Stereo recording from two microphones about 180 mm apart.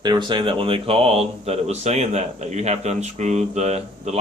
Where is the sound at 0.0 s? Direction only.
25° right (ahead or behind).